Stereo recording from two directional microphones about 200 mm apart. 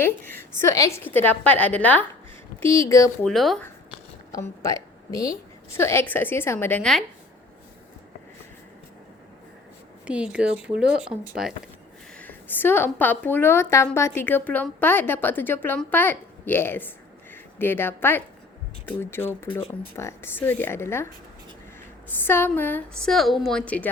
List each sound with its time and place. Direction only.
0.0 s a woman's voice: 10° left (ahead or behind)
3.2 s speech: centre (ahead or behind)
4.3 s a woman's voice: 15° left (ahead or behind)
10.3 s speech: 5° right (ahead or behind)
12.1 s a woman's voice: 10° left (ahead or behind)
22.2 s a woman's voice: 10° left (ahead or behind)